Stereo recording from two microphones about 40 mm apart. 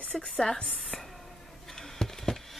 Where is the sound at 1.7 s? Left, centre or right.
Centre.